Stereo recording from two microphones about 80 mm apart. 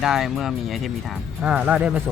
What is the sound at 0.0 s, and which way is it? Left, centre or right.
Speech, centre.